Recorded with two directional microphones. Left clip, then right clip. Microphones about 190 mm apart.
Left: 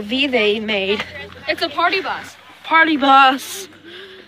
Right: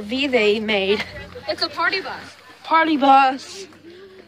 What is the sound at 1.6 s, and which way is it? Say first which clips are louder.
Speech: left 4 dB; 25° left (ahead or behind).